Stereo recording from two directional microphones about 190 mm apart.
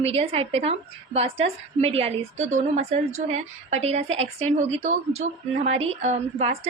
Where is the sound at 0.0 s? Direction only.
30° right (ahead or behind).